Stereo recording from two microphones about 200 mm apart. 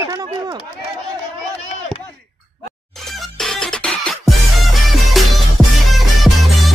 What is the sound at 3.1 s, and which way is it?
Music, centre (ahead or behind).